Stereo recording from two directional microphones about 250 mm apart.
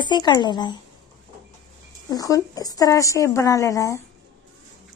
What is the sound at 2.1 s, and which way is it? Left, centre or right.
A woman's voice, centre.